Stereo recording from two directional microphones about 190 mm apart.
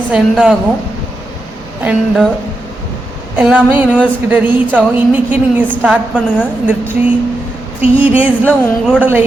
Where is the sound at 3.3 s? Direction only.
10° right (ahead or behind).